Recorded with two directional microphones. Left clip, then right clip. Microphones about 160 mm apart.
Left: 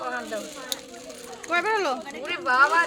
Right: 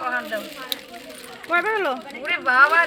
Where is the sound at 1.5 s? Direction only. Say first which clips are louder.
Right 3 dB; 15° right (ahead or behind).